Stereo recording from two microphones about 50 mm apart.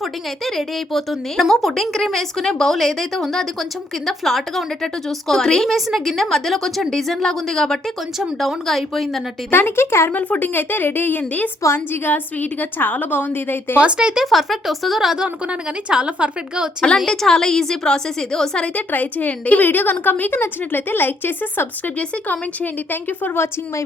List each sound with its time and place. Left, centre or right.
0.4 s a woman's voice: centre
9.5 s speech: left
10.1 s a woman's voice: left
13.8 s a woman's voice: centre
14.3 s a woman's voice: centre
15.9 s a woman's voice: centre
17.1 s a woman's voice: centre
18.6 s a woman's voice: left
21.9 s a woman's voice: left